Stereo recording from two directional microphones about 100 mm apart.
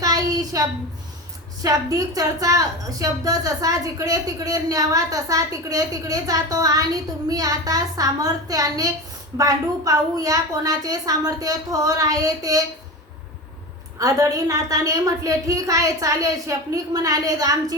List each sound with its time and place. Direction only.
0.0 s a sound: 40° right (ahead or behind)
1.6 s a woman's voice: 40° right (ahead or behind)
14.0 s a woman's voice: 35° right (ahead or behind)